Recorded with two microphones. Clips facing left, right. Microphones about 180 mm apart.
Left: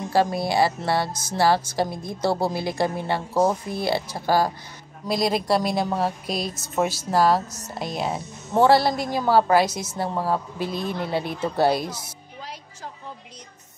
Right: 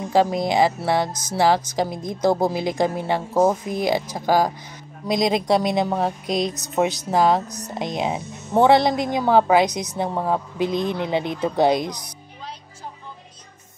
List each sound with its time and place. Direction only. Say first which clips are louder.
0.1 s a woman's voice: right 3 dB; 15° right (ahead or behind)